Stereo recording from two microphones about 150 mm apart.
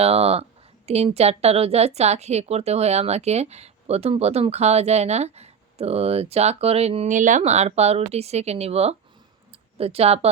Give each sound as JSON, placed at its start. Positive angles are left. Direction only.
{"t": 0.0, "sound": "a woman's voice", "side_deg": -40}